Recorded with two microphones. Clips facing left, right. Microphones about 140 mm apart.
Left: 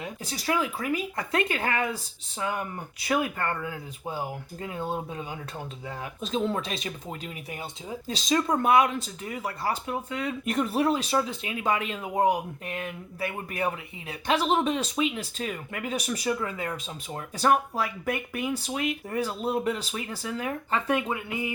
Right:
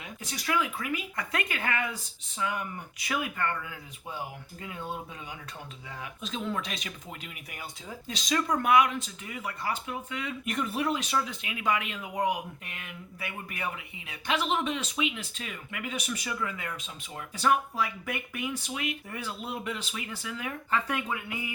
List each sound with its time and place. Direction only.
0.0 s speech: 35° left (ahead or behind)